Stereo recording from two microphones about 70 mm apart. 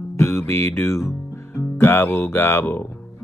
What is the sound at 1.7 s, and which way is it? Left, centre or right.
Speech, left.